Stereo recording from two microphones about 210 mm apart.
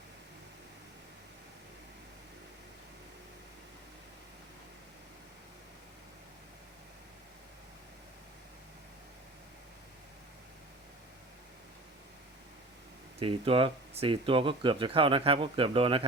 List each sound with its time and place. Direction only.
13.1 s speech: 25° right (ahead or behind)